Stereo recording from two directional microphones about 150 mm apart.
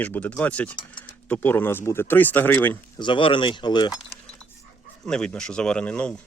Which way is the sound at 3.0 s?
35° left (ahead or behind).